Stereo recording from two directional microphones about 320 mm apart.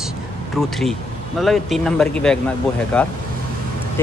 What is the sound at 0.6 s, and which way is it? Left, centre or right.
Speech, centre.